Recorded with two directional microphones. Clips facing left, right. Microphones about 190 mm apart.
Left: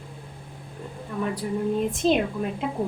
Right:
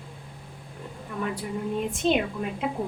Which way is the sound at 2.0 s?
Centre (ahead or behind).